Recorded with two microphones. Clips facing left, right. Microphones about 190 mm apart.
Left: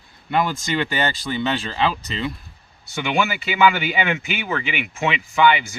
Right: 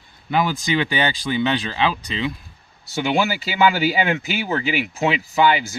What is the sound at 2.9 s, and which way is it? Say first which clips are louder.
Speech: right 2 dB; 35° right (ahead or behind).